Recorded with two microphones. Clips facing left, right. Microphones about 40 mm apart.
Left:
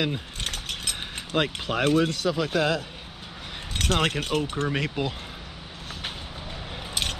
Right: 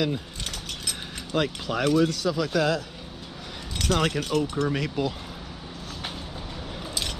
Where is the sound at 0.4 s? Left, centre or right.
Left.